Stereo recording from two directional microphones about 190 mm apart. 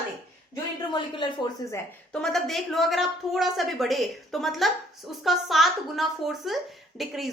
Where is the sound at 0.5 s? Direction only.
20° left (ahead or behind).